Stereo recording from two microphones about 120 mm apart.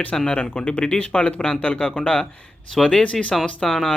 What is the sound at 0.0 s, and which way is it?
Speech, 10° left (ahead or behind).